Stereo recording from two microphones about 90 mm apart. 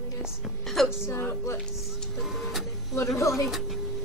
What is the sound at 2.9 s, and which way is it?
Speech, 35° left (ahead or behind).